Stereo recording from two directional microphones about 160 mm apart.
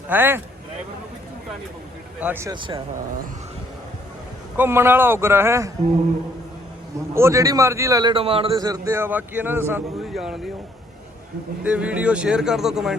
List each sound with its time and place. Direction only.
0.1 s a man's voice: 15° right (ahead or behind)
2.2 s a man's voice: 15° right (ahead or behind)
2.5 s a man's voice: 30° right (ahead or behind)
4.5 s a man's voice: 15° right (ahead or behind)
7.1 s a man's voice: 15° right (ahead or behind)
8.1 s a man's voice: 35° right (ahead or behind)
8.5 s a man's voice: 20° right (ahead or behind)
10.1 s speech: centre (ahead or behind)
11.6 s speech: 5° right (ahead or behind)